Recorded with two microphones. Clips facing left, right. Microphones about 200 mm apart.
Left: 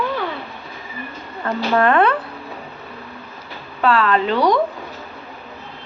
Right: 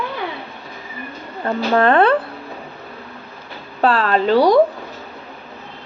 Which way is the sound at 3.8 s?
35° right (ahead or behind).